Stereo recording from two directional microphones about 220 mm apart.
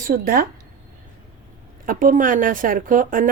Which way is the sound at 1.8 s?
40° right (ahead or behind).